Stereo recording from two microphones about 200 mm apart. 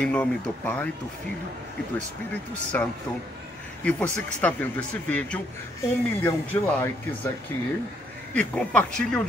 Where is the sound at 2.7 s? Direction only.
10° left (ahead or behind).